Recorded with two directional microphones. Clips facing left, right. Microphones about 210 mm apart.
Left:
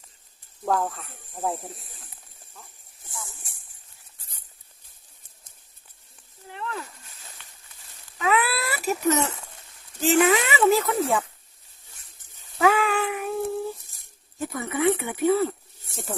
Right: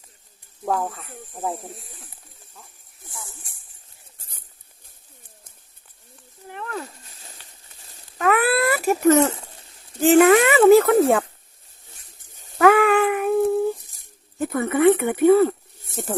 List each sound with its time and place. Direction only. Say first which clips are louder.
0.6 s speech: even; 5° right (ahead or behind)
4.2 s patter: right 4 dB; 50° right (ahead or behind)
6.5 s a sound: right 1 dB; 55° right (ahead or behind)
7.4 s a sound: right 1 dB; 35° right (ahead or behind)
8.2 s speech: right 5 dB; 55° right (ahead or behind)
9.2 s speech: right 8 dB; 30° right (ahead or behind)
10.0 s speech: right 7 dB; 55° right (ahead or behind)
12.5 s a sound: right 6 dB; 60° right (ahead or behind)
14.3 s speech: right 7 dB; 55° right (ahead or behind)